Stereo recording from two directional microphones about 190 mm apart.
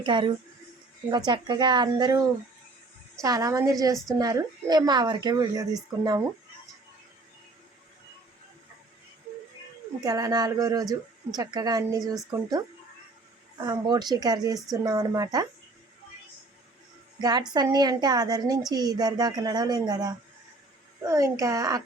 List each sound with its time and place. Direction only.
0.0 s a woman's voice: 25° right (ahead or behind)
10.0 s a woman's voice: 20° right (ahead or behind)
13.6 s a woman's voice: 20° right (ahead or behind)
17.2 s a woman's voice: 20° right (ahead or behind)